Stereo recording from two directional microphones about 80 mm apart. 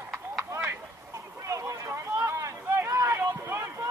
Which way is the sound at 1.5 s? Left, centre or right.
Right.